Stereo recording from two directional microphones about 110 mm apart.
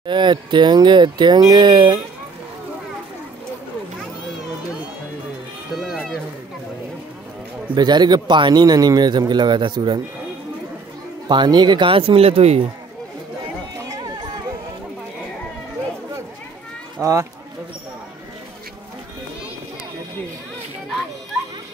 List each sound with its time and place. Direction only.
0.0 s speech: 45° right (ahead or behind)
5.9 s a sound: centre (ahead or behind)
7.7 s a man's voice: 40° right (ahead or behind)
11.2 s speech: 40° right (ahead or behind); by 12.6 s 65° right (ahead or behind)
13.8 s a sound: 40° right (ahead or behind)
17.0 s speech: 30° right (ahead or behind)